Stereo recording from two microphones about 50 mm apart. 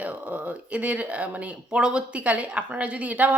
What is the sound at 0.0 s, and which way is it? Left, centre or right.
A woman's voice, right.